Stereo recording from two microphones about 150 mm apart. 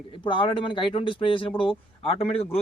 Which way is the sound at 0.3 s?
35° left (ahead or behind).